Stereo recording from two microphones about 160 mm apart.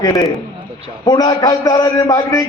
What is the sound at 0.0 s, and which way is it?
A man's voice, 20° left (ahead or behind).